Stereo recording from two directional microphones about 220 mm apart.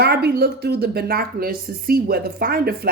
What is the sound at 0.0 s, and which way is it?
A woman's voice, 45° right (ahead or behind).